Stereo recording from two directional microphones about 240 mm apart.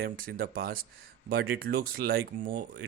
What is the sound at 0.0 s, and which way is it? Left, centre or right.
Speech, right.